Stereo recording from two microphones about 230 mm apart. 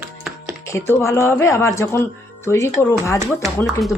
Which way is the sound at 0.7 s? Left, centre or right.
Centre.